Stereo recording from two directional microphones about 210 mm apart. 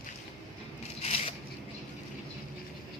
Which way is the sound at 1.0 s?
25° left (ahead or behind).